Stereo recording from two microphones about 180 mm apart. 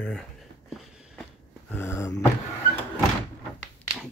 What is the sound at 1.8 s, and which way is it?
Speech, 15° left (ahead or behind).